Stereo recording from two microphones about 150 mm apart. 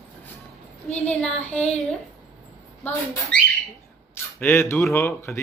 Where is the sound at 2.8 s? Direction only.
10° left (ahead or behind).